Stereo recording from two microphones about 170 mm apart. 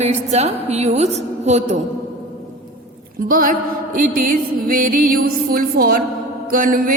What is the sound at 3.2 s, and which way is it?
Music, 55° right (ahead or behind).